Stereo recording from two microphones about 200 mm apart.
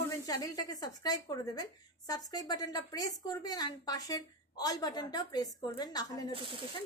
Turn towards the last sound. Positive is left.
turn(degrees=-25)  # may be behind; listen again after turning